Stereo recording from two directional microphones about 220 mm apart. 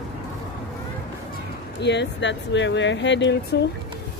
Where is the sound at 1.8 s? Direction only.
50° left (ahead or behind).